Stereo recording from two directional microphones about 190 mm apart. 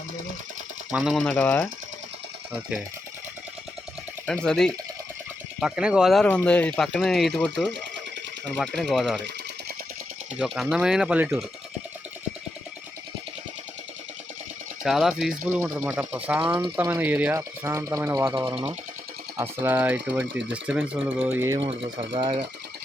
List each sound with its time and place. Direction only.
0.9 s speech: centre (ahead or behind)
4.4 s speech: 5° left (ahead or behind)
10.3 s speech: centre (ahead or behind)
14.8 s speech: centre (ahead or behind)
21.6 s speech: 30° right (ahead or behind)